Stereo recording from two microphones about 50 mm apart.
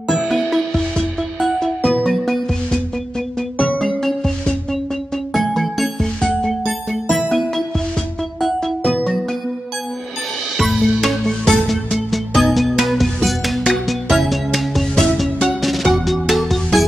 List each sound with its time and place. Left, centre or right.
0.1 s music: centre
3.5 s music: left
3.8 s music: centre
10.6 s music: centre